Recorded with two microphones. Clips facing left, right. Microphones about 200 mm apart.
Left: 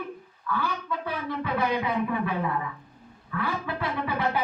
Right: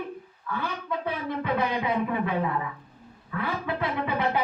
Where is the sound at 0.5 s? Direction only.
20° right (ahead or behind).